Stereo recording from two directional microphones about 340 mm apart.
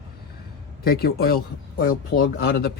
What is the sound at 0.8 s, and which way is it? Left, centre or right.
A man's voice, left.